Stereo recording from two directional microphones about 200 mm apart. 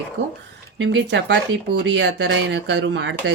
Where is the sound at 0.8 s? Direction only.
60° right (ahead or behind).